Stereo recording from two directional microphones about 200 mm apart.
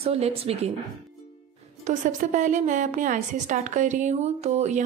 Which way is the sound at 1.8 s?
40° right (ahead or behind).